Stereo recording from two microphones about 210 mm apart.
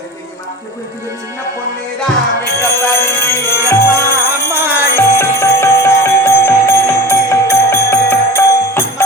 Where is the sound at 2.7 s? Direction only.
10° left (ahead or behind).